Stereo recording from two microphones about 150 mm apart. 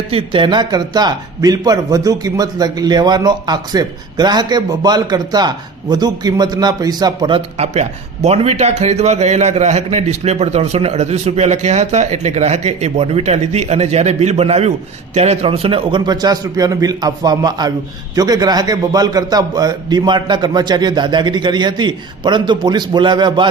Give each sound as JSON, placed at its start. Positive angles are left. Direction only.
{"t": 0.1, "sound": "a man's voice", "side_deg": -35}